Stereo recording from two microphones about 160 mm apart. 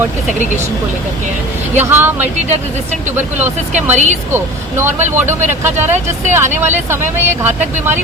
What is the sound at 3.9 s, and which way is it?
Speech, 45° right (ahead or behind).